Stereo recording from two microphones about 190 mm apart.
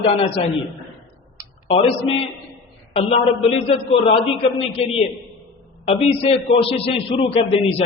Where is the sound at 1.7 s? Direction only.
30° left (ahead or behind).